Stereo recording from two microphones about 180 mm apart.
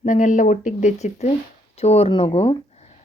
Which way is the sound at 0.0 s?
45° left (ahead or behind).